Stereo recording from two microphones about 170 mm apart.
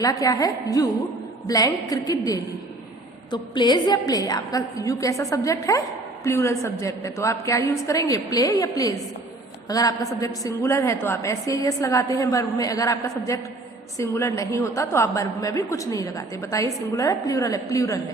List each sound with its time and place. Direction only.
0.0 s a woman's voice: 20° left (ahead or behind)